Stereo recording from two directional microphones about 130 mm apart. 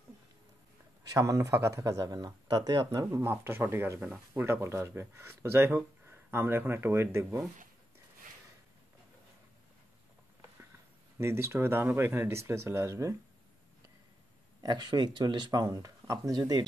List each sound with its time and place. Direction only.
1.1 s speech: 25° right (ahead or behind)
11.1 s speech: 20° right (ahead or behind)
14.6 s speech: 35° right (ahead or behind)